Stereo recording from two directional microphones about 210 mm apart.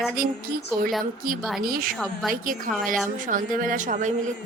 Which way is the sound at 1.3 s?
40° right (ahead or behind).